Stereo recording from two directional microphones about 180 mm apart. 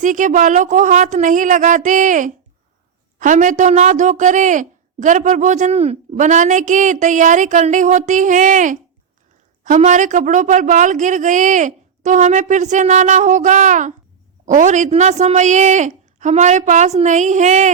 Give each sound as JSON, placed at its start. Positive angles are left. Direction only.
{"t": 0.0, "sound": "a woman's voice", "side_deg": -45}